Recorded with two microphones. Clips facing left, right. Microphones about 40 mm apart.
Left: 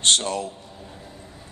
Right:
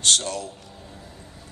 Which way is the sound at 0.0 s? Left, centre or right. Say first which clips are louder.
Left 2 dB; left.